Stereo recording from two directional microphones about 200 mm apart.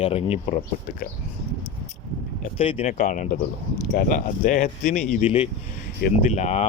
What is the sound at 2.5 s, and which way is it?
Speech, 30° left (ahead or behind).